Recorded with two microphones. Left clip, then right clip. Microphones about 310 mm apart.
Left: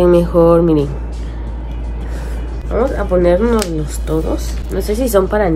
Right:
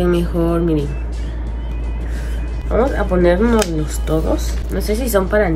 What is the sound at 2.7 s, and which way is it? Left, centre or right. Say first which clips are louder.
Speech: left 2 dB; centre.